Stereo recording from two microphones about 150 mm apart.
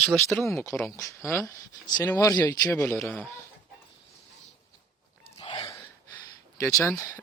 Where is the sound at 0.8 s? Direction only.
20° left (ahead or behind).